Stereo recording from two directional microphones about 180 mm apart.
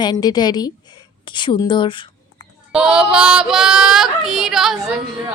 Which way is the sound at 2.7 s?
5° right (ahead or behind).